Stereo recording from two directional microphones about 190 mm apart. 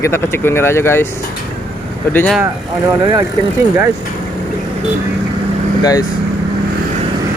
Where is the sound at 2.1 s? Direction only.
5° left (ahead or behind).